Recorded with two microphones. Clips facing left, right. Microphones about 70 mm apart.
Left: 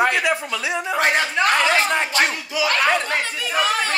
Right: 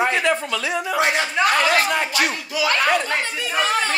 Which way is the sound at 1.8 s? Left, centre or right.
Left.